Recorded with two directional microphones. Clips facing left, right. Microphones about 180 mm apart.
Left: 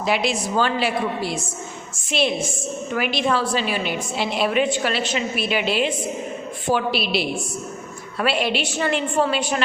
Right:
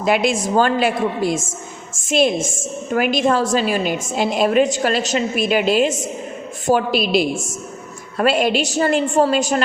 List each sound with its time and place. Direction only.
0.0 s a woman's voice: 50° right (ahead or behind)